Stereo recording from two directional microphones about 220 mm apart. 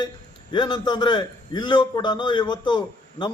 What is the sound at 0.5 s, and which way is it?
A man's voice, 20° left (ahead or behind).